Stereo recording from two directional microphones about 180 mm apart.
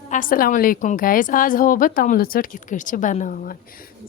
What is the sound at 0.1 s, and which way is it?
Speech, 50° left (ahead or behind).